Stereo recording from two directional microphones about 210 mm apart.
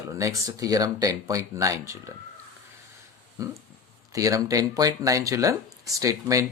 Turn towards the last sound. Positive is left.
turn(degrees=-15)  # may be behind; listen again after turning